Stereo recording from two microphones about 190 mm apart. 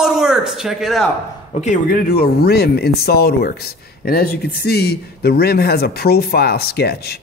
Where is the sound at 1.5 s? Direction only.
40° left (ahead or behind).